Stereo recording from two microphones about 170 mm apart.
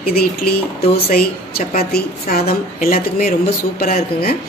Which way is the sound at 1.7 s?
65° left (ahead or behind).